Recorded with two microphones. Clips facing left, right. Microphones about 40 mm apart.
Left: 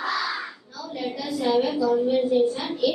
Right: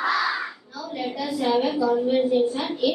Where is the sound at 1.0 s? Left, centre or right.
Centre.